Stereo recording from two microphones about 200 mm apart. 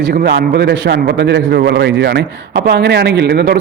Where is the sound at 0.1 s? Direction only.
55° right (ahead or behind).